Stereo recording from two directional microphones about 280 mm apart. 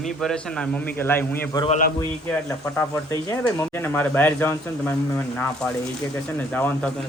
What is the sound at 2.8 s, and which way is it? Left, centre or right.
Speech, centre.